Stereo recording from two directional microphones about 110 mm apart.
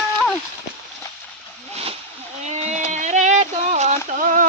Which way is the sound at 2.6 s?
90° right.